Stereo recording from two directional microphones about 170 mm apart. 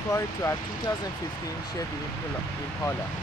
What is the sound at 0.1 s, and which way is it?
Speech, 15° left (ahead or behind).